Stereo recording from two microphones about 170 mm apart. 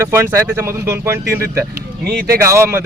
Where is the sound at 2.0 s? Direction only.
65° right (ahead or behind).